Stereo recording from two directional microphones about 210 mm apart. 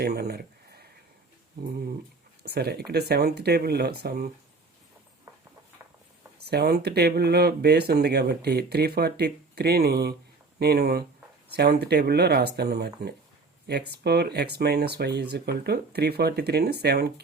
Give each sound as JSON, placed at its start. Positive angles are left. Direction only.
{"t": 0.0, "sound": "a sound", "side_deg": -50}
{"t": 2.4, "sound": "speech", "side_deg": -50}
{"t": 6.4, "sound": "speech", "side_deg": -50}